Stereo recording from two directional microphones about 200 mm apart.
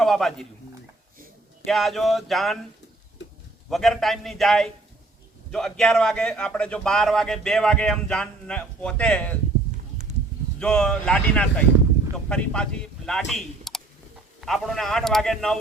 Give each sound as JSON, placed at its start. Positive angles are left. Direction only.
{"t": 0.0, "sound": "speech", "side_deg": 0}
{"t": 1.6, "sound": "a man's voice", "side_deg": 0}
{"t": 3.2, "sound": "a sound", "side_deg": 65}
{"t": 3.7, "sound": "a man's voice", "side_deg": 0}
{"t": 10.6, "sound": "a man's voice", "side_deg": 5}